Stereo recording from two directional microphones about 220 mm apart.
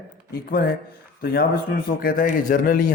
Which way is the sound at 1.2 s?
45° left (ahead or behind).